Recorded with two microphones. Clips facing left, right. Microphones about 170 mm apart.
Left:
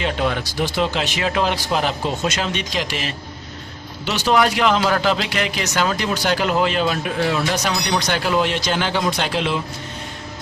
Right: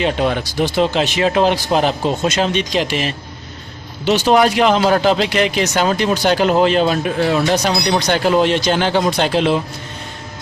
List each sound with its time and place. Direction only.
0.0 s speech: 30° right (ahead or behind)